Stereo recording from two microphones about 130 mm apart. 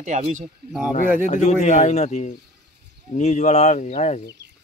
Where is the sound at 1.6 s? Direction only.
60° left (ahead or behind).